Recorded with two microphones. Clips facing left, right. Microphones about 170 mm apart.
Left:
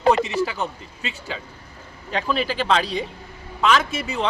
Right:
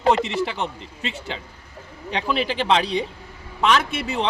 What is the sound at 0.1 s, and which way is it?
Speech, 25° right (ahead or behind).